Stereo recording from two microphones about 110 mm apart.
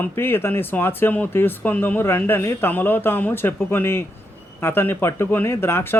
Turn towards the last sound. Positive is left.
turn(degrees=20)  # may be behind; listen again after turning